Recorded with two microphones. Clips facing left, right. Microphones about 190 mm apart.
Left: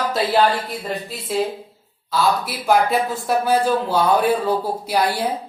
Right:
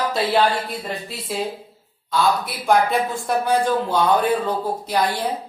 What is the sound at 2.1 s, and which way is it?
Speech, 5° left (ahead or behind).